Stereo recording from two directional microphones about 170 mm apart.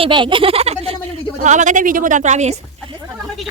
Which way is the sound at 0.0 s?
30° right (ahead or behind).